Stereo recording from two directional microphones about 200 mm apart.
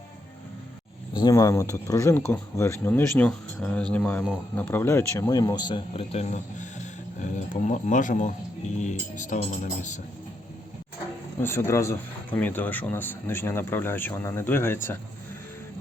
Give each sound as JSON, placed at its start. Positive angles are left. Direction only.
{"t": 1.2, "sound": "speech", "side_deg": 15}
{"t": 11.3, "sound": "speech", "side_deg": 10}